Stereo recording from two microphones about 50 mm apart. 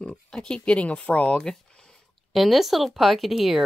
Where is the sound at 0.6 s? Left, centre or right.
Left.